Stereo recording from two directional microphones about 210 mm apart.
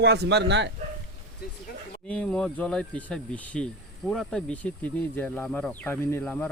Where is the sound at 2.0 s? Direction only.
5° left (ahead or behind).